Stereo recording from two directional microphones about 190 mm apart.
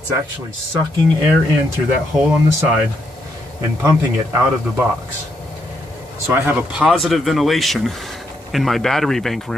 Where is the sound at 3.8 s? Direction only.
15° right (ahead or behind).